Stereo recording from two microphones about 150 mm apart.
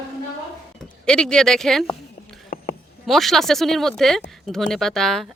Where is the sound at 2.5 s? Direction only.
80° left.